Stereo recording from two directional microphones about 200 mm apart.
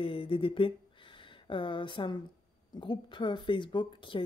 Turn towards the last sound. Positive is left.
turn(degrees=25)  # may be behind; listen again after turning